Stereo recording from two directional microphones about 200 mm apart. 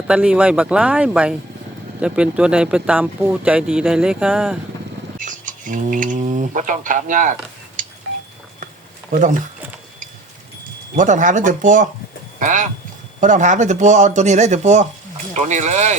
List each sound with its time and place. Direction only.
0.1 s speech: 5° right (ahead or behind)
5.2 s speech: 40° right (ahead or behind)
7.8 s a sound: 40° right (ahead or behind)
10.9 s speech: 40° right (ahead or behind)